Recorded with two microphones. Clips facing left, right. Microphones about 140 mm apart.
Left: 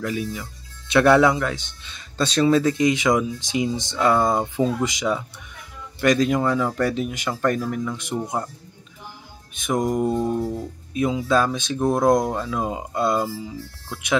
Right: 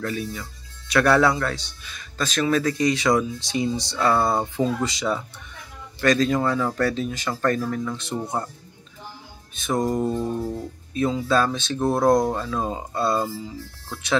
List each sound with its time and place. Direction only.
0.0 s speech: 15° left (ahead or behind)
9.7 s speech: 15° left (ahead or behind)